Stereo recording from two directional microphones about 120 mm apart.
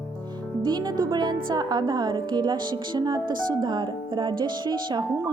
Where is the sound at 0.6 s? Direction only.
35° right (ahead or behind).